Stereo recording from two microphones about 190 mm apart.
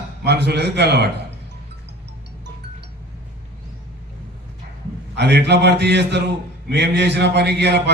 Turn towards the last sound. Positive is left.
turn(degrees=-60)  # may be behind; listen again after turning